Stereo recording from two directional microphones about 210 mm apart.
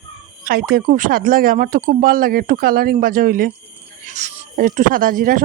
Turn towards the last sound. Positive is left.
turn(degrees=-40)  # may be behind; listen again after turning